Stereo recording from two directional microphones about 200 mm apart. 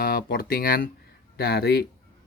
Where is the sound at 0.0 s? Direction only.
50° left (ahead or behind).